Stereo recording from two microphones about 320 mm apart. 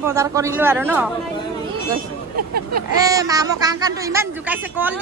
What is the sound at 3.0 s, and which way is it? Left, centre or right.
Speech, centre.